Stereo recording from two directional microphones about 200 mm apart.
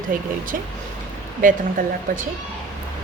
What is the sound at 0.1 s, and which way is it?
A woman's voice, 45° right (ahead or behind).